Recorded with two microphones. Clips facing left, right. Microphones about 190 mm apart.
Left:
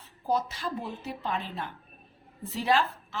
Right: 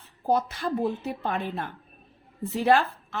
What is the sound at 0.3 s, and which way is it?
A woman's voice, 55° right (ahead or behind).